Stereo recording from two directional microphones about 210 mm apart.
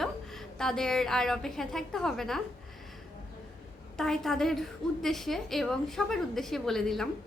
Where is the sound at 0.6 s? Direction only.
Centre (ahead or behind).